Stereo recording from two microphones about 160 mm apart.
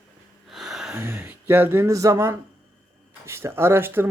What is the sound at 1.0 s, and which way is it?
Speech, 15° right (ahead or behind).